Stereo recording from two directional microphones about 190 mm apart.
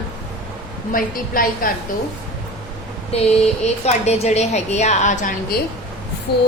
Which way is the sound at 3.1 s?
35° left (ahead or behind).